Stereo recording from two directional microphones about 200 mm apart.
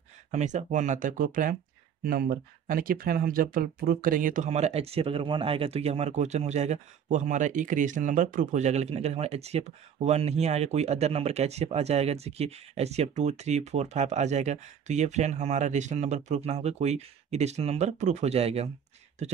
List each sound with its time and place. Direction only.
0.3 s speech: 35° right (ahead or behind)